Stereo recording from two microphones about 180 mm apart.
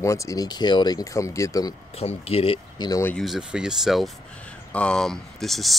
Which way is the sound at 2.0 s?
35° left (ahead or behind).